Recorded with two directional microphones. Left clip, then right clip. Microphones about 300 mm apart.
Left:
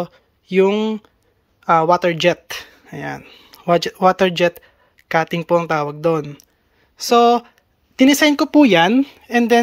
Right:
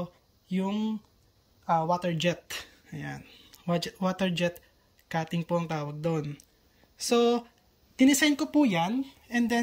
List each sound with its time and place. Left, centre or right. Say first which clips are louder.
0.0 s speech: left 13 dB; centre
2.0 s speech: left 14 dB; centre
8.7 s speech: left 15 dB; left
9.3 s speech: left 14 dB; centre